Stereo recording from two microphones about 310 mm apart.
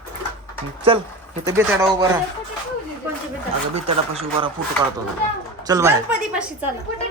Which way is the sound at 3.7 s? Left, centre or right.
Right.